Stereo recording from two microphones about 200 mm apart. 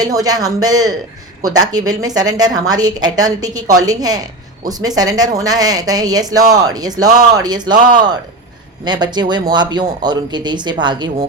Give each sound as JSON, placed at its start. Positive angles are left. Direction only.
{"t": 0.0, "sound": "speech", "side_deg": -20}